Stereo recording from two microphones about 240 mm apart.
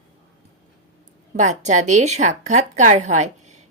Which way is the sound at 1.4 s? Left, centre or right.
Right.